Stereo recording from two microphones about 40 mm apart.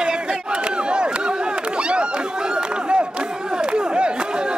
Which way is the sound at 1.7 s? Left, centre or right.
Right.